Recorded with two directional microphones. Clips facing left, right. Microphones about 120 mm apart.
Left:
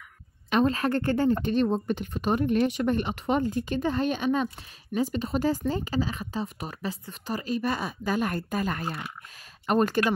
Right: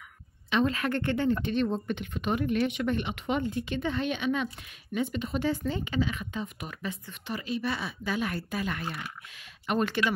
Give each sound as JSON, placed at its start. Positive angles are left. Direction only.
{"t": 0.5, "sound": "speech", "side_deg": 40}